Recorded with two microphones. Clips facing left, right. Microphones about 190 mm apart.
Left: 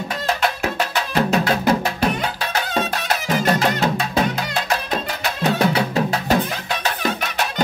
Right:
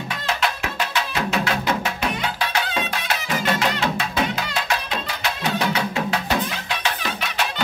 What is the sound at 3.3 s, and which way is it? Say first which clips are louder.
Music: left 4 dB; 40° left (ahead or behind).